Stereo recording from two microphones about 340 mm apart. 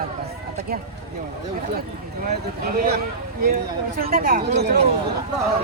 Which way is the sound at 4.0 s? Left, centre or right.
Right.